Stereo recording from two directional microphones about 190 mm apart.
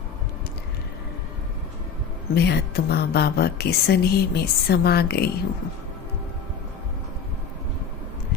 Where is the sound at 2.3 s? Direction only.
60° left (ahead or behind).